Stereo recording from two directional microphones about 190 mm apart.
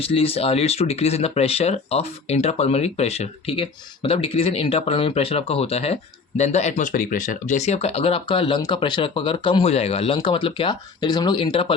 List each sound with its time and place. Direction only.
0.0 s speech: 30° left (ahead or behind)